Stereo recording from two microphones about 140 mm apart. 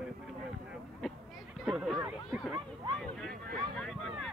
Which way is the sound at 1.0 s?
Centre (ahead or behind).